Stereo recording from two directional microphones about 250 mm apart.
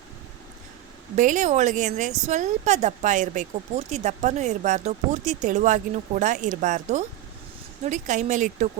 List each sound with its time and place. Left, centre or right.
1.1 s a woman's voice: right